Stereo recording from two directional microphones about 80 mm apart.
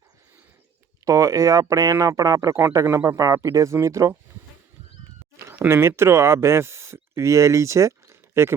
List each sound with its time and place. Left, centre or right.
1.0 s speech: right
5.5 s speech: right